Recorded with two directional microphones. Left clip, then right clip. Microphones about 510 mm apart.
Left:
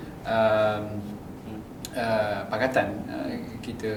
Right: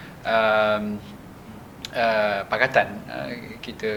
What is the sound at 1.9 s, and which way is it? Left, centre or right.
Speech, right.